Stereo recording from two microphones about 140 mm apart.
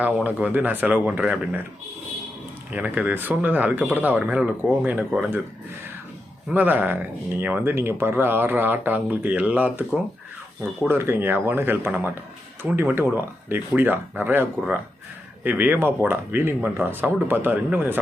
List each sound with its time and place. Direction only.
0.0 s speech: 10° right (ahead or behind)
2.7 s speech: 10° right (ahead or behind)
6.5 s speech: 10° right (ahead or behind)
15.4 s speech: 15° right (ahead or behind)